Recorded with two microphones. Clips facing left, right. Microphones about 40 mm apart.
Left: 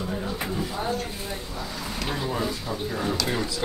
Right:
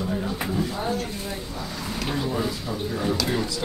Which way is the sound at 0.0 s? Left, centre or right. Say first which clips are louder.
Right 2 dB; centre.